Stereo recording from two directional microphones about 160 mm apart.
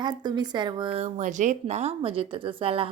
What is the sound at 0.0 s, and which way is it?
A woman's voice, 25° right (ahead or behind).